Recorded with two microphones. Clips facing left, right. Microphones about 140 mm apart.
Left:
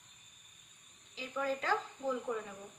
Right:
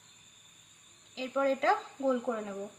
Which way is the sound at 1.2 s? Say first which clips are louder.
Right 7 dB; 90° right.